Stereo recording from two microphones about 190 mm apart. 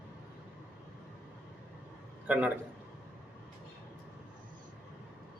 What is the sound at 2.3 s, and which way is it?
Speech, 10° right (ahead or behind).